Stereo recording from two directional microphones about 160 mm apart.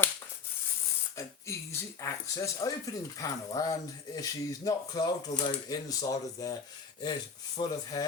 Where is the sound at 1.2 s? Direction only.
20° left (ahead or behind).